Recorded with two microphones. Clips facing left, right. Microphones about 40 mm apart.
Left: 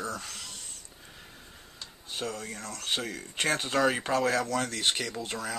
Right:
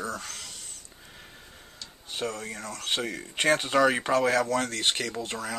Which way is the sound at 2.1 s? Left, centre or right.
Centre.